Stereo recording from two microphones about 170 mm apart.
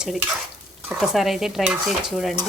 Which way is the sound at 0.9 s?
Centre (ahead or behind).